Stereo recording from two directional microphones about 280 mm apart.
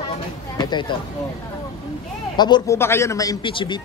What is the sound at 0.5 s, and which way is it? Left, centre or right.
Speech, centre.